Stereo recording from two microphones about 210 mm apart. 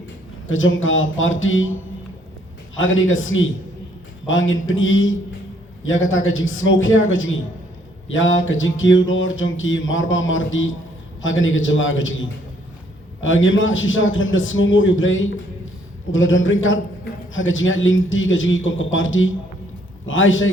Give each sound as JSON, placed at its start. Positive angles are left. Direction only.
{"t": 0.4, "sound": "a man's voice", "side_deg": 65}
{"t": 2.7, "sound": "a man's voice", "side_deg": 65}
{"t": 8.0, "sound": "a sound", "side_deg": 65}
{"t": 13.2, "sound": "a man's voice", "side_deg": 65}